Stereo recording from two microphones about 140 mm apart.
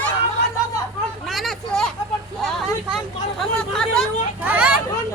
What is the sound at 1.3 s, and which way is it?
Vehicle, centre (ahead or behind).